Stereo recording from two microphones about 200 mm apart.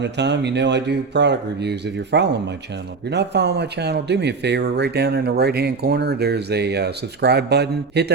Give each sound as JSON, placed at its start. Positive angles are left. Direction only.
{"t": 0.0, "sound": "speech", "side_deg": -60}